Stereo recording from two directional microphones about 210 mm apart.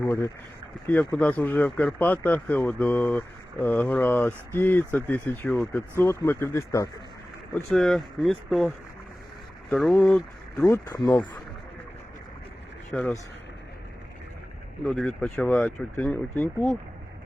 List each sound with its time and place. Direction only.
0.0 s speech: 10° left (ahead or behind)
7.5 s speech: centre (ahead or behind)
10.7 s speech: 15° left (ahead or behind)
12.9 s speech: 5° left (ahead or behind)
14.8 s speech: 5° left (ahead or behind)